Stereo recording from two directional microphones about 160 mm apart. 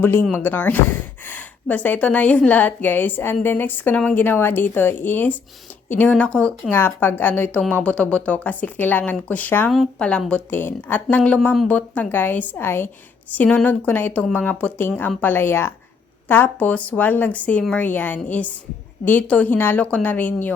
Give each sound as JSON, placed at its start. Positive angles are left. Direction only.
{"t": 0.0, "sound": "a woman's voice", "side_deg": 15}